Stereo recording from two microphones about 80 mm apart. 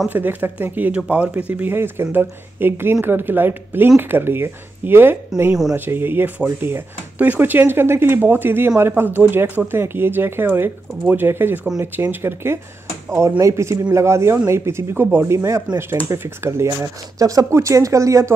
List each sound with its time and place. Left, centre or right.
0.1 s speech: right
5.5 s speech: centre
5.8 s speech: right